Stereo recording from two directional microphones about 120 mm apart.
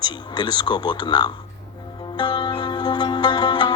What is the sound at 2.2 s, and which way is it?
Music, 40° left (ahead or behind).